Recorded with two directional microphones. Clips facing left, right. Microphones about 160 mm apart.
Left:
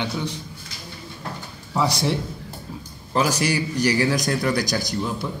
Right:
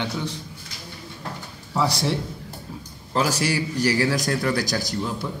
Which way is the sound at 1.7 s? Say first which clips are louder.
Left 1 dB; 15° left (ahead or behind).